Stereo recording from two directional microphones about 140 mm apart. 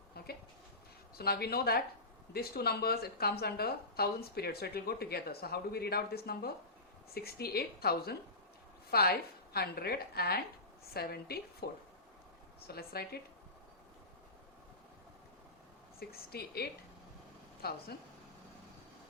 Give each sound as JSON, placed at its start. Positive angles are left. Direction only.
{"t": 1.1, "sound": "a woman's voice", "side_deg": 90}
{"t": 12.6, "sound": "a woman's voice", "side_deg": 90}
{"t": 16.0, "sound": "a woman's voice", "side_deg": 90}
{"t": 17.6, "sound": "a woman's voice", "side_deg": 90}